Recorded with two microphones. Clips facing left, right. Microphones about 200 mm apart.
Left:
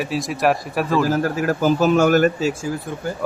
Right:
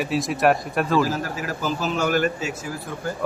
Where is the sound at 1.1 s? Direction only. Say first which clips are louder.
Left 8 dB; 50° left (ahead or behind).